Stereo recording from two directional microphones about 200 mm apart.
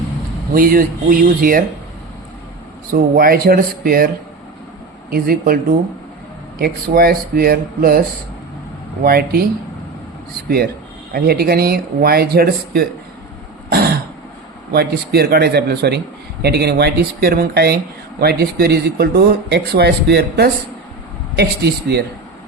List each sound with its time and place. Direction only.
0.5 s speech: 45° right (ahead or behind)
2.9 s speech: 45° right (ahead or behind)
5.1 s speech: 50° right (ahead or behind)
6.6 s speech: 50° right (ahead or behind)
9.0 s speech: 50° right (ahead or behind)
11.1 s speech: 50° right (ahead or behind)
13.7 s throat clearing: 50° right (ahead or behind)
14.7 s speech: 50° right (ahead or behind)